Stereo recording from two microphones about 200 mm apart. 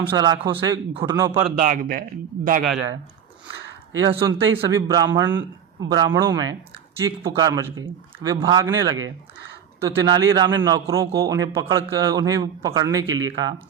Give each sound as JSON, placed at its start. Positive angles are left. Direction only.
{"t": 0.0, "sound": "a man's voice", "side_deg": -25}
{"t": 1.6, "sound": "speech", "side_deg": -40}
{"t": 3.9, "sound": "a man's voice", "side_deg": -25}